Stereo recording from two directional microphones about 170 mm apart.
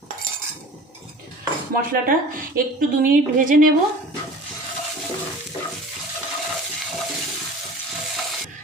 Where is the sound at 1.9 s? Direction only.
60° right (ahead or behind).